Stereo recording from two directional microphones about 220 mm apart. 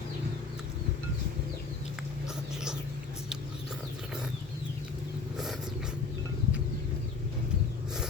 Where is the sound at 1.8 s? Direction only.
5° right (ahead or behind).